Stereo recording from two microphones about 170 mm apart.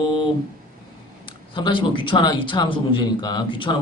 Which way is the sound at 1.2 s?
30° left (ahead or behind).